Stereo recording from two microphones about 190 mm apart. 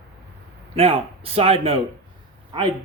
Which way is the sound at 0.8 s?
30° right (ahead or behind).